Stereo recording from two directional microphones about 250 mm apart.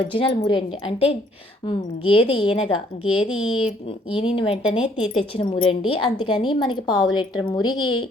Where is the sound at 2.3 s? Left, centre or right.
Centre.